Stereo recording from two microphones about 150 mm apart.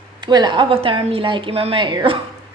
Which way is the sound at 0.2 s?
30° right (ahead or behind).